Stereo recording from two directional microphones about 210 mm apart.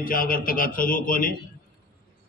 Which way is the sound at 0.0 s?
40° left (ahead or behind).